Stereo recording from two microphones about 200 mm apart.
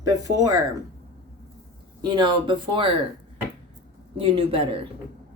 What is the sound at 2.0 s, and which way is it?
Speech, 20° right (ahead or behind).